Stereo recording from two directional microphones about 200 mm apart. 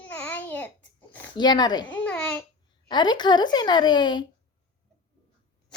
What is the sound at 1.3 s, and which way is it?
Speech, 20° left (ahead or behind).